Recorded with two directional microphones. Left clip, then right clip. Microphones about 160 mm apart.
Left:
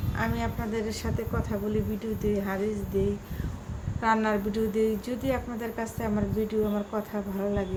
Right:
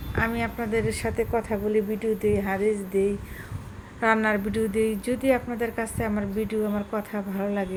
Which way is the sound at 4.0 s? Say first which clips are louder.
Right 3 dB; 25° right (ahead or behind).